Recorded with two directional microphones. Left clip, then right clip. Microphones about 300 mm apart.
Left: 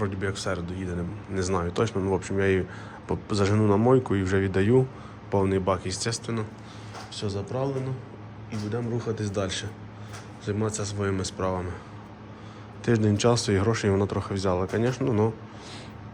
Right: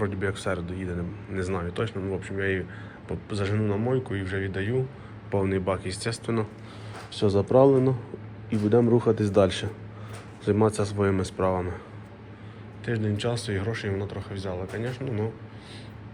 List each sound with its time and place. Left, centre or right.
0.0 s speech: centre
7.1 s speech: centre
8.4 s a man's voice: centre
12.8 s speech: centre